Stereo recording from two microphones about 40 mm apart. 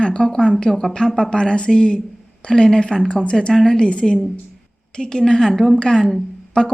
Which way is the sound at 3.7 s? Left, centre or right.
Left.